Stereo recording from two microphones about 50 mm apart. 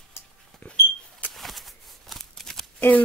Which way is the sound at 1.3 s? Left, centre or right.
Centre.